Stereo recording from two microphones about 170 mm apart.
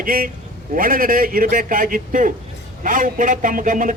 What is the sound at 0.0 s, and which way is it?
A man's voice, 55° right (ahead or behind).